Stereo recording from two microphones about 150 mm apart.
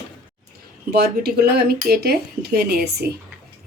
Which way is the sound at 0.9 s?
90° right.